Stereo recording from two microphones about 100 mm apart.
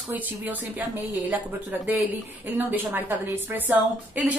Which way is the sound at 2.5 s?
20° right (ahead or behind).